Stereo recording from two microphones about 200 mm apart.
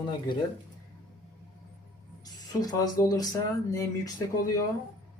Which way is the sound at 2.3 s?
20° left (ahead or behind).